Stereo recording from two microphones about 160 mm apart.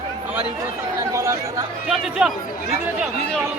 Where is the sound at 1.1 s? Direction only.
20° right (ahead or behind).